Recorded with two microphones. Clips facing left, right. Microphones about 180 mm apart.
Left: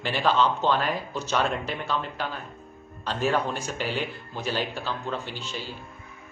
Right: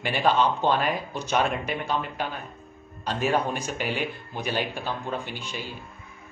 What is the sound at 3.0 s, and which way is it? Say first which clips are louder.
Speech: right 1 dB; 15° right (ahead or behind).